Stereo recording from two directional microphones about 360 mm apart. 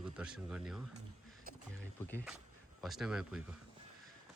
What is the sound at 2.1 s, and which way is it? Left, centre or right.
Speech, centre.